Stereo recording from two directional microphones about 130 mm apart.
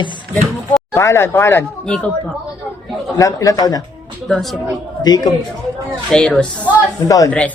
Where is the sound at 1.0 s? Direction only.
20° left (ahead or behind).